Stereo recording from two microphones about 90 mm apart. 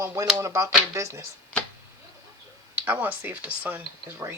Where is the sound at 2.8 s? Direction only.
20° right (ahead or behind).